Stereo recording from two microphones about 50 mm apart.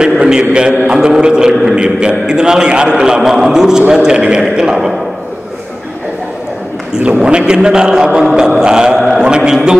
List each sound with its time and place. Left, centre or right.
0.0 s a man's voice: centre
6.9 s a man's voice: centre